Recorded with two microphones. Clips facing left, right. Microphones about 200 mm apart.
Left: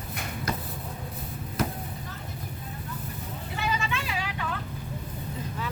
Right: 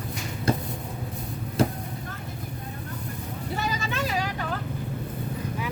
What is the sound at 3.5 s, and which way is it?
Vehicle, 40° right (ahead or behind).